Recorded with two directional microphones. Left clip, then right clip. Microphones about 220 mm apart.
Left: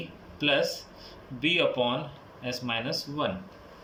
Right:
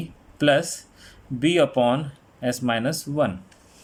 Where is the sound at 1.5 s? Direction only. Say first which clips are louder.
Right 7 dB; 40° right (ahead or behind).